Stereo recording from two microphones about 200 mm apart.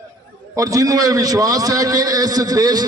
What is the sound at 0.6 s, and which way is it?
A man's voice, 15° right (ahead or behind).